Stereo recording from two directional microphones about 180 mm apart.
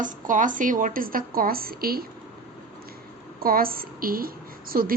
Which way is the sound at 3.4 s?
55° right (ahead or behind).